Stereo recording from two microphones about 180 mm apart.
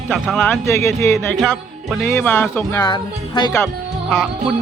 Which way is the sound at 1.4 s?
5° left (ahead or behind).